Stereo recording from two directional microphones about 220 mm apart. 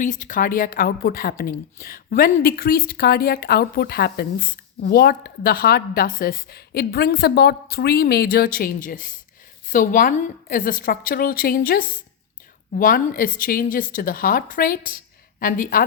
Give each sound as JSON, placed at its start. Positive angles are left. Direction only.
{"t": 0.0, "sound": "a woman's voice", "side_deg": 35}